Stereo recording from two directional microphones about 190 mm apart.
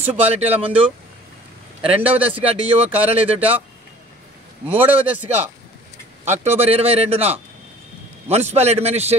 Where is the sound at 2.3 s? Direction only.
30° right (ahead or behind).